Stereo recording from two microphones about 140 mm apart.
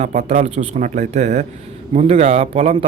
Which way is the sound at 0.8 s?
60° right (ahead or behind).